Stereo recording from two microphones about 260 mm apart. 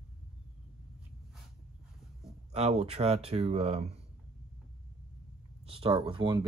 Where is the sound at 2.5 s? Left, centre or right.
Right.